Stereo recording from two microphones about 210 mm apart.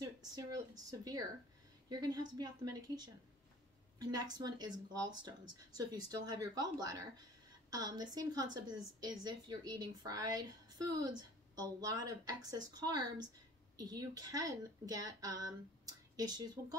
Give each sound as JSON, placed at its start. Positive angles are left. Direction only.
{"t": 0.0, "sound": "a woman's voice", "side_deg": -15}